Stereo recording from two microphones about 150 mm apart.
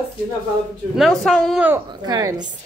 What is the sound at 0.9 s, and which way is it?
Speech, centre (ahead or behind).